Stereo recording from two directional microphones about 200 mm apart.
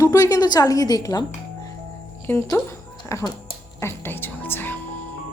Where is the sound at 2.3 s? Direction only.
15° left (ahead or behind).